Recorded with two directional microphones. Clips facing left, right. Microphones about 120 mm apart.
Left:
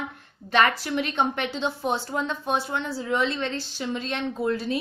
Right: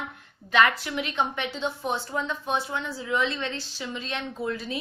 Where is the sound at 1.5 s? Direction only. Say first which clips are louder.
Left 3 dB; 35° left (ahead or behind).